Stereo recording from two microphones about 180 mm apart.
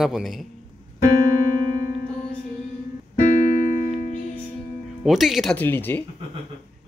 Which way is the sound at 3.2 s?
45° left (ahead or behind).